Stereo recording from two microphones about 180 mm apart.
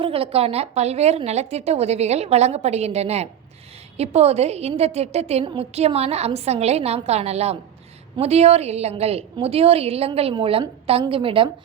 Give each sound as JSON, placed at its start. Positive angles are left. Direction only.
{"t": 0.0, "sound": "a woman's voice", "side_deg": -30}